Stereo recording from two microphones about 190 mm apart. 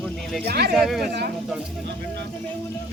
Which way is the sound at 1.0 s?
60° right (ahead or behind).